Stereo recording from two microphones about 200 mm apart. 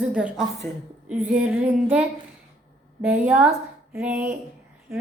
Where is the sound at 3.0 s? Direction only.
10° right (ahead or behind).